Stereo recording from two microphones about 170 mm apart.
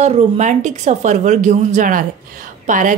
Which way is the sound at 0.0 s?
40° right (ahead or behind).